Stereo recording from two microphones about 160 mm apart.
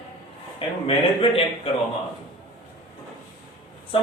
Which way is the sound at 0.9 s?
35° left (ahead or behind).